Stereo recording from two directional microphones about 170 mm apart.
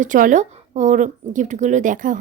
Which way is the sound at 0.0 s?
50° right (ahead or behind).